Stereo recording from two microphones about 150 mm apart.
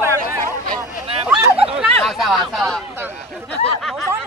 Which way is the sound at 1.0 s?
40° right (ahead or behind).